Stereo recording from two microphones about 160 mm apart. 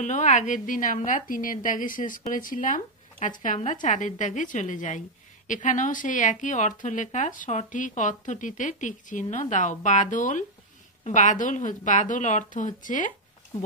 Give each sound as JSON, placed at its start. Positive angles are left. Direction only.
{"t": 0.0, "sound": "a woman's voice", "side_deg": 50}